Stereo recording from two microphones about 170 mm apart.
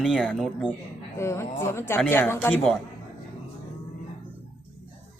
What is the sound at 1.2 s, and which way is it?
Speech, 15° left (ahead or behind).